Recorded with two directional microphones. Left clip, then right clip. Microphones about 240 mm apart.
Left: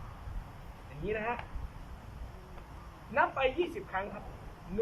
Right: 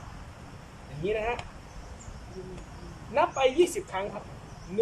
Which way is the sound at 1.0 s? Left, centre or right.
Centre.